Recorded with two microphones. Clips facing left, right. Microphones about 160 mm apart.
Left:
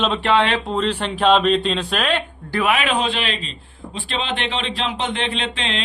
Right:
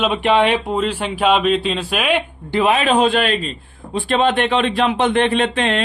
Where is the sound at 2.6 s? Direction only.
35° right (ahead or behind).